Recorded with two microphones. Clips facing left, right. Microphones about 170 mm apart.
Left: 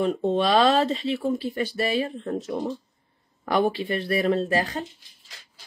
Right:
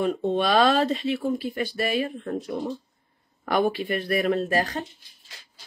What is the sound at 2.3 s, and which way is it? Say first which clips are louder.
Speech: left 2 dB; 45° left (ahead or behind).